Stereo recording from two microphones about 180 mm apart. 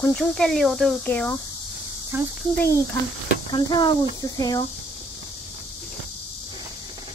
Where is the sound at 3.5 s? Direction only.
25° left (ahead or behind).